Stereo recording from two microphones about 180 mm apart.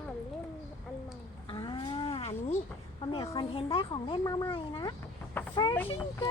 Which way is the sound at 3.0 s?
30° left (ahead or behind).